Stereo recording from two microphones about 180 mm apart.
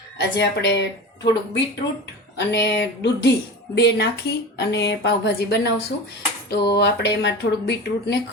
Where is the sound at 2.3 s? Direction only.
70° left (ahead or behind).